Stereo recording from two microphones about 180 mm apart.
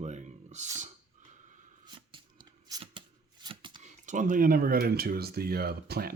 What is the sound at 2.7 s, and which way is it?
Shuffling cards, 25° right (ahead or behind).